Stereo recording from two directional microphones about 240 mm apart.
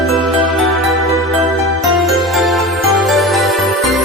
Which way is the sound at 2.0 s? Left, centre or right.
Centre.